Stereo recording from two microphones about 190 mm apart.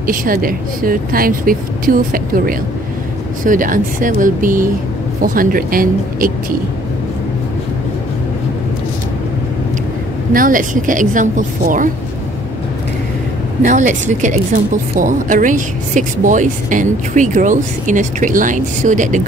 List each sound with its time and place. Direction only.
0.0 s a woman's voice: 45° right (ahead or behind)
10.3 s a woman's voice: 45° right (ahead or behind)
13.6 s a woman's voice: 40° right (ahead or behind)